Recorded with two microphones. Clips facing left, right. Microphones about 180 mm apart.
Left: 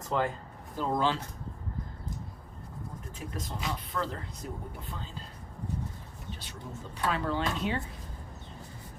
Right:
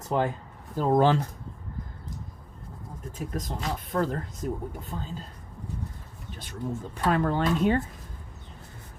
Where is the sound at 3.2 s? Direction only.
45° right (ahead or behind).